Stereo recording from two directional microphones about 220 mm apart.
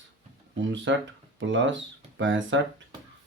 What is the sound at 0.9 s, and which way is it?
Speech, 60° right (ahead or behind).